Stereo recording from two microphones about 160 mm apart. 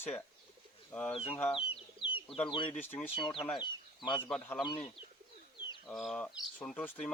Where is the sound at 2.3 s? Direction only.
35° left (ahead or behind).